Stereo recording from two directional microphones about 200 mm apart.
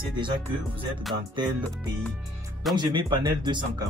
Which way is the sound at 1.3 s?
20° right (ahead or behind).